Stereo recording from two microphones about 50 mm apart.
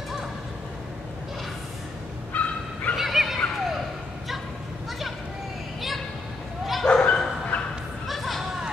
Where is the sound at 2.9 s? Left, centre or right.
Centre.